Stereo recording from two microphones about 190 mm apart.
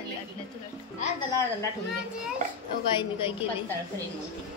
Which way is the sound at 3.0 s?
30° left (ahead or behind).